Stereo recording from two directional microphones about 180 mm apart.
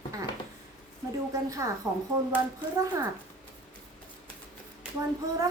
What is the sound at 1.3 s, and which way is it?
Speech, 20° right (ahead or behind).